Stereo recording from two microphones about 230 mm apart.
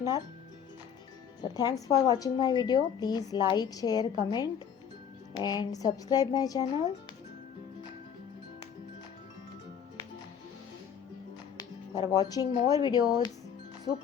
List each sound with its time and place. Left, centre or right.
1.4 s a woman's voice: centre
11.5 s speech: centre